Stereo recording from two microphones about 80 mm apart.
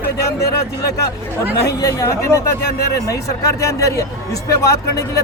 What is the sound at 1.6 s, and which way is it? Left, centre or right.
A man's voice, left.